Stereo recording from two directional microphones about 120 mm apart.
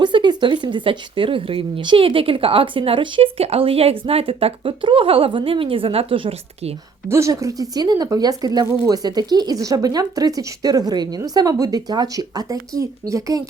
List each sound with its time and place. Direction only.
0.0 s speech: 40° right (ahead or behind)
7.1 s speech: 25° right (ahead or behind)